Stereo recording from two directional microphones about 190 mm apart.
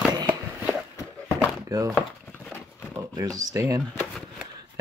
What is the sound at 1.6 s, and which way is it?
Speech, 20° right (ahead or behind).